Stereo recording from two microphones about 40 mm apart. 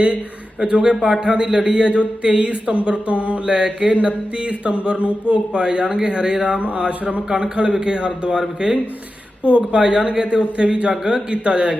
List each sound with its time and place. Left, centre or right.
0.6 s speech: right
7.3 s speech: right